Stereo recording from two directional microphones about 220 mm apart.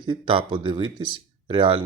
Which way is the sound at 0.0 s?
25° right (ahead or behind).